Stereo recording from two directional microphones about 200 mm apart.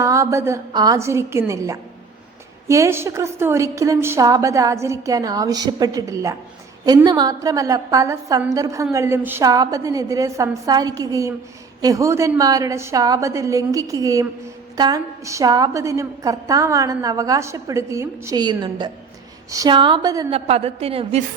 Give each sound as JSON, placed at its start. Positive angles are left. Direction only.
{"t": 0.0, "sound": "a woman's voice", "side_deg": -15}
{"t": 20.3, "sound": "a woman's voice", "side_deg": -30}